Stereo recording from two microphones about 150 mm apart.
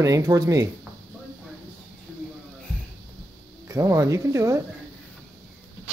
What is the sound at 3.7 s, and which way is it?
Speech, 20° right (ahead or behind).